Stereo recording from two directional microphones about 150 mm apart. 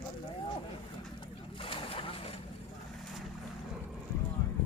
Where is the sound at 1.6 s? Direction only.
35° left (ahead or behind).